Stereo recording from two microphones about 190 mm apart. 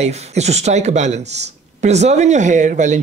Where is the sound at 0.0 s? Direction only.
35° right (ahead or behind).